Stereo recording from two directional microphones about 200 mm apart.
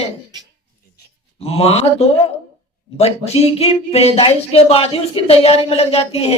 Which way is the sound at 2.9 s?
30° left (ahead or behind).